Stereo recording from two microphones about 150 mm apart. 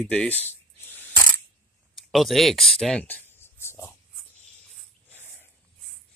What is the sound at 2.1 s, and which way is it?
Speech, centre (ahead or behind).